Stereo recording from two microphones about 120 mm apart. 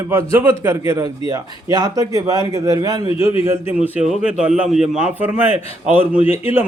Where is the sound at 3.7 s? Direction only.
15° right (ahead or behind).